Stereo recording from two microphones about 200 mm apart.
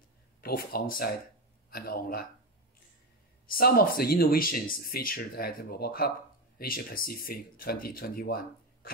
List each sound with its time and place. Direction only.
0.4 s speech: 50° left (ahead or behind)
3.4 s speech: 45° left (ahead or behind)